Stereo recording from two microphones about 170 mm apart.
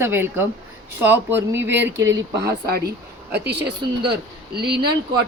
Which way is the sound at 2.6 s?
65° right (ahead or behind).